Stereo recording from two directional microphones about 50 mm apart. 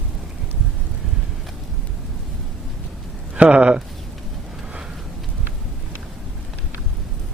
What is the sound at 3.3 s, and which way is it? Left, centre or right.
Speech, right.